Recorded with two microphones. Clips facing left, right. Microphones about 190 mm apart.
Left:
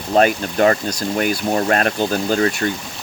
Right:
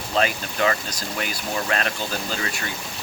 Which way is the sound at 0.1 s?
45° left (ahead or behind).